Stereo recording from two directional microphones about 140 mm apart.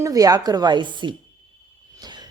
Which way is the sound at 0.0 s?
25° right (ahead or behind).